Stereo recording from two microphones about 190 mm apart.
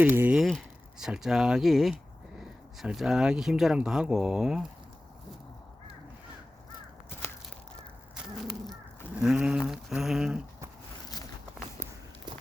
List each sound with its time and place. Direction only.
0.0 s speech: 10° right (ahead or behind)
9.2 s speech: 5° right (ahead or behind)
11.8 s walk: 25° right (ahead or behind)